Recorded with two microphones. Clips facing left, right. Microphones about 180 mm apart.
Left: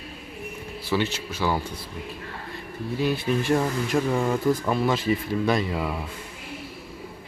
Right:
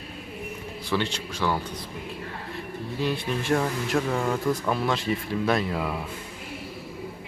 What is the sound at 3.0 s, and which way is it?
Speech, 5° left (ahead or behind).